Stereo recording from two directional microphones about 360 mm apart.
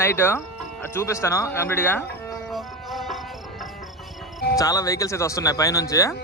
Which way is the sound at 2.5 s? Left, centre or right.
Centre.